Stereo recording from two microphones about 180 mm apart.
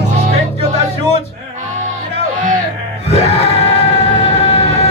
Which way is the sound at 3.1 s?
35° left (ahead or behind).